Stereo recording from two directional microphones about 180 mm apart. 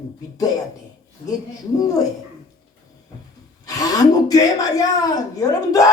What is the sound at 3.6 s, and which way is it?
A woman's voice, 20° left (ahead or behind).